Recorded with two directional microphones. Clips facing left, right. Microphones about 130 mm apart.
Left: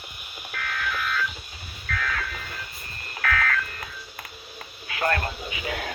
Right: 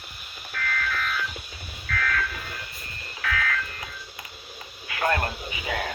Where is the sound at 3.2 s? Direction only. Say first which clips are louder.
Left 3 dB; 55° left (ahead or behind).